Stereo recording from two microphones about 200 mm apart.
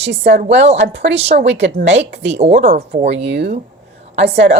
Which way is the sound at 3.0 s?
60° right (ahead or behind).